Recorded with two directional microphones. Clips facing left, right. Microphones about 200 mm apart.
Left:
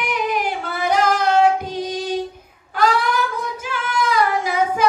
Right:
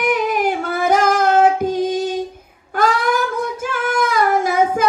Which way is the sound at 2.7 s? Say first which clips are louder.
Right 1 dB; 50° right (ahead or behind).